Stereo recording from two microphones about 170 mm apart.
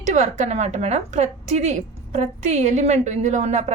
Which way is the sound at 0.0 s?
40° right (ahead or behind).